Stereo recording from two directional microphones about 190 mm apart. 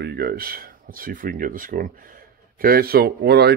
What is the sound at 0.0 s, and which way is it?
Speech, 55° right (ahead or behind).